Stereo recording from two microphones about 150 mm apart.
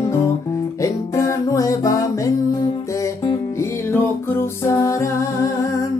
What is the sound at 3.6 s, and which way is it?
Music, 15° left (ahead or behind).